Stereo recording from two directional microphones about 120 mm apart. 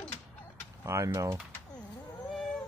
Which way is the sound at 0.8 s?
25° right (ahead or behind).